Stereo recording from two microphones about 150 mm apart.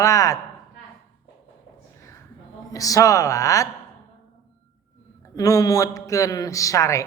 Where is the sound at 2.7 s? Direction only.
25° left (ahead or behind).